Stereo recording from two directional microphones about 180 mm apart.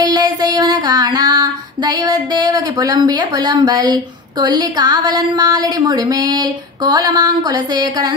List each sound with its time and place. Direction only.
0.0 s female singing: 20° right (ahead or behind)